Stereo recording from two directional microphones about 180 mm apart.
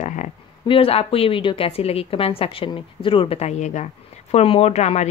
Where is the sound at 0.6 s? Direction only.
30° left (ahead or behind).